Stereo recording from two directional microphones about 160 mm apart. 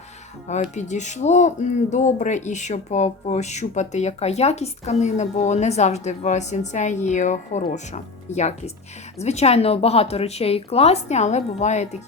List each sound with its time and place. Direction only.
0.7 s a woman's voice: 45° left (ahead or behind)